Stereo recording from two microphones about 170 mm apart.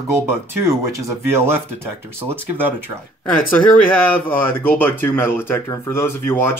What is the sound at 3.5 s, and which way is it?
Speech, 10° left (ahead or behind).